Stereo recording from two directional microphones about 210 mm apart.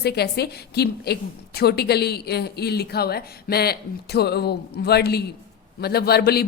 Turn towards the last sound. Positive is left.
turn(degrees=50)  # may be behind; listen again after turning